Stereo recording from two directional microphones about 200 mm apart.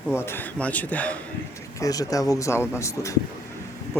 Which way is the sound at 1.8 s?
15° left (ahead or behind).